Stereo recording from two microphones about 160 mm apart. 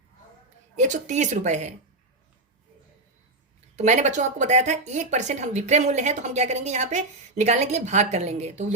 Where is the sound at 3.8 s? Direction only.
45° right (ahead or behind).